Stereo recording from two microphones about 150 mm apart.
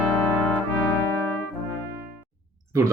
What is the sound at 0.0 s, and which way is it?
Trumpet, 5° right (ahead or behind).